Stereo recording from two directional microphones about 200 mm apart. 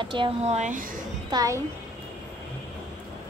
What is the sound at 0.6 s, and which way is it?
Speech, 40° right (ahead or behind).